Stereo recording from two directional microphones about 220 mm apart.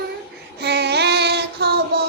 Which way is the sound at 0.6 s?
50° right (ahead or behind).